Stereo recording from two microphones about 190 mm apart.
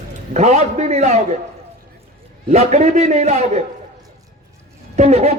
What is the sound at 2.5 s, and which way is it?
A man's voice, 35° right (ahead or behind).